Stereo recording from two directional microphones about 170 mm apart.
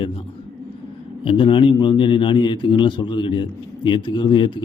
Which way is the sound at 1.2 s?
30° left (ahead or behind).